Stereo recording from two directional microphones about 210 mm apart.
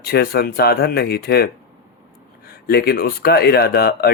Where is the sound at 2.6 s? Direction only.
45° left (ahead or behind).